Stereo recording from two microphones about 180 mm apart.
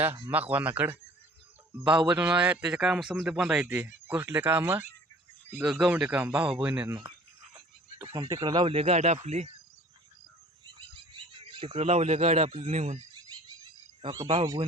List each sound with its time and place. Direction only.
0.0 s a man's voice: 10° right (ahead or behind)
8.1 s speech: 25° right (ahead or behind)
10.8 s speech: 25° right (ahead or behind)
14.0 s speech: 25° right (ahead or behind)